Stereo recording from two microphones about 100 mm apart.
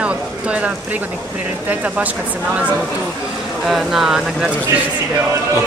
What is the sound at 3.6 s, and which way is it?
Speech, centre (ahead or behind).